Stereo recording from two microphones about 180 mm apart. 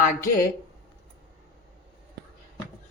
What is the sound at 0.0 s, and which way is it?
Speech, 50° left (ahead or behind).